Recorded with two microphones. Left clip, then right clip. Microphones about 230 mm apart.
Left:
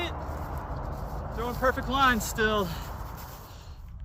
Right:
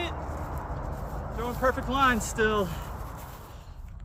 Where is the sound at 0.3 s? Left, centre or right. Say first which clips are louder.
Right 1 dB; left.